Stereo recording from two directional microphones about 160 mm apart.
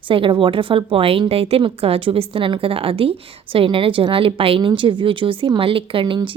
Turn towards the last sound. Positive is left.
turn(degrees=-30)  # may be behind; listen again after turning